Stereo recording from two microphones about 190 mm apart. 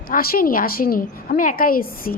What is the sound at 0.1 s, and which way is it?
A woman's voice, 50° left (ahead or behind).